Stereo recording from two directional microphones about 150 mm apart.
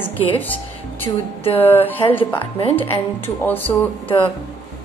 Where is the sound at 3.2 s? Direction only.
15° left (ahead or behind).